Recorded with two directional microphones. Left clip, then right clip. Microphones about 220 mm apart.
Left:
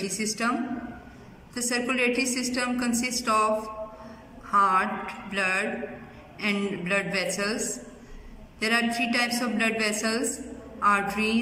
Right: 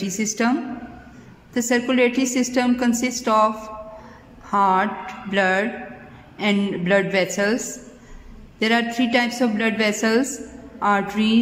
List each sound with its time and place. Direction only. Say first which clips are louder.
0.2 s a woman's voice: right 6 dB; 40° right (ahead or behind)